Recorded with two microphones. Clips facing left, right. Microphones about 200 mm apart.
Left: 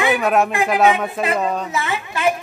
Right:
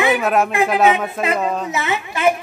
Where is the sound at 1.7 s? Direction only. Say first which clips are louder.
Right 2 dB; 20° right (ahead or behind).